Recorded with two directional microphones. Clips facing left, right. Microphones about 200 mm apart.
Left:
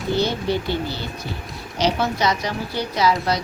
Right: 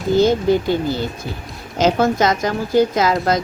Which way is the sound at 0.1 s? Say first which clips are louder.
Right 7 dB; 45° right (ahead or behind).